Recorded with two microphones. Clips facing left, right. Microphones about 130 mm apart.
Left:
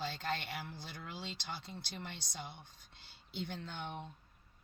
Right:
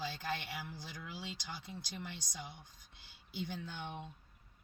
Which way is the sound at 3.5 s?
60° left (ahead or behind).